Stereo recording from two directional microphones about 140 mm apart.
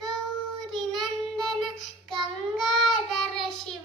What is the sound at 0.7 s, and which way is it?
Child singing, centre (ahead or behind).